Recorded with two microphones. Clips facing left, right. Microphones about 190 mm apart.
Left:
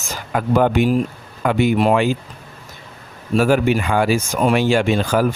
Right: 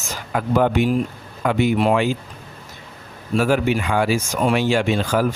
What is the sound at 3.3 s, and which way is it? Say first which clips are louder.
Speech: left 3 dB; 45° left (ahead or behind).